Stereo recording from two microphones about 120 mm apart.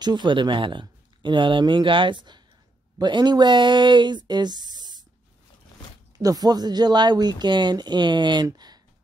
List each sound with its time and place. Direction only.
0.0 s speech: 40° right (ahead or behind)
6.1 s speech: 30° right (ahead or behind)
8.5 s a sound: 35° right (ahead or behind)